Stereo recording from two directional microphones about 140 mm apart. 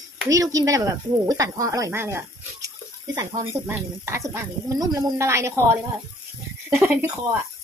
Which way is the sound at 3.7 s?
20° right (ahead or behind).